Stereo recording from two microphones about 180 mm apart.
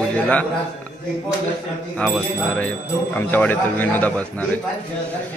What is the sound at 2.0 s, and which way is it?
Speech, 5° left (ahead or behind).